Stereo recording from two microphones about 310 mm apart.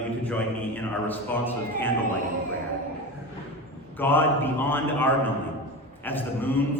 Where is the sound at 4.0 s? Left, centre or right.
Centre.